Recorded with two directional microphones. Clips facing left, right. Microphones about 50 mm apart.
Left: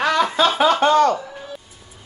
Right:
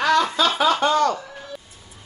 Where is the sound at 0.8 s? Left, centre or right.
Left.